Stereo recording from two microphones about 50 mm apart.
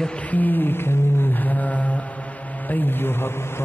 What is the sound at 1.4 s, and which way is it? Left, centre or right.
Mantra, left.